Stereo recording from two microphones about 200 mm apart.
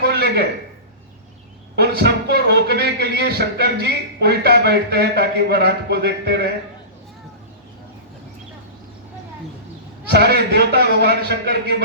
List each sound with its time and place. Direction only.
0.0 s a sound: 55° right (ahead or behind)
1.7 s a man's voice: 55° right (ahead or behind)
10.1 s a man's voice: 55° right (ahead or behind)